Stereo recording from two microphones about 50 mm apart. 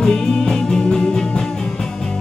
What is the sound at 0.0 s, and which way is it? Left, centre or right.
Music, centre.